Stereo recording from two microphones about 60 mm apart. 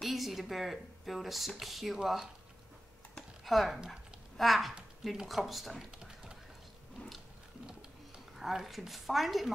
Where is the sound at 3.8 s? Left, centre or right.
Centre.